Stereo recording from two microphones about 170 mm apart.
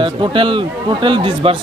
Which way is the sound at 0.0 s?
30° right (ahead or behind).